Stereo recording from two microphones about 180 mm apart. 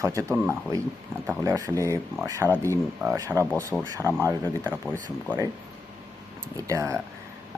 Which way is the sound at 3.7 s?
Centre (ahead or behind).